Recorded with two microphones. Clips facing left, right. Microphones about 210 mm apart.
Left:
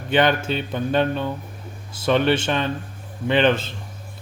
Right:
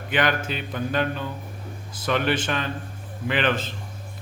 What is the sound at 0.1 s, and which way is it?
Speech, 25° left (ahead or behind).